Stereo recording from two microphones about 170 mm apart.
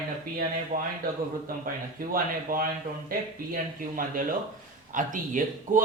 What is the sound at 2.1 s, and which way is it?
Speech, 55° right (ahead or behind).